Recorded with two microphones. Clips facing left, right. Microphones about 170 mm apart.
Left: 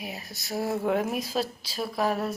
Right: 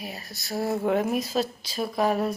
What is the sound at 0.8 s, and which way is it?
Speech, centre (ahead or behind).